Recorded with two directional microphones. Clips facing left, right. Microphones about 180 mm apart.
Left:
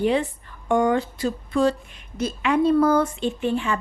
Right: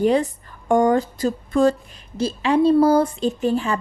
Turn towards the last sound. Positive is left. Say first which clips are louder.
# right 3 dB
turn(degrees=-40)  # may be behind; listen again after turning